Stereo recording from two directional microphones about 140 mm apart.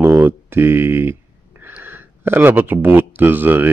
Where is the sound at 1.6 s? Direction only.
15° right (ahead or behind).